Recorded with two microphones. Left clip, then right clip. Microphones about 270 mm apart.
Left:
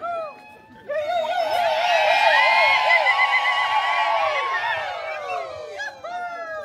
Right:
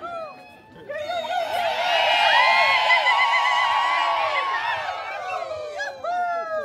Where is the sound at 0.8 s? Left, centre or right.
Centre.